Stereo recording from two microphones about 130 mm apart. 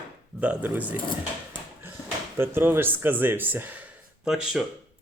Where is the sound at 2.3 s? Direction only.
20° right (ahead or behind).